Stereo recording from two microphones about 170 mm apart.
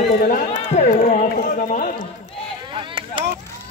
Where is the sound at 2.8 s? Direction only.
30° right (ahead or behind).